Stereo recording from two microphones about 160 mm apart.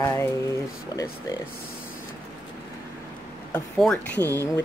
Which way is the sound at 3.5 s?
5° left (ahead or behind).